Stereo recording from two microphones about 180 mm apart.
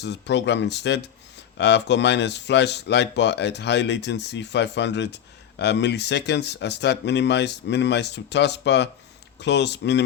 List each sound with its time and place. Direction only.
0.0 s speech: 75° left (ahead or behind)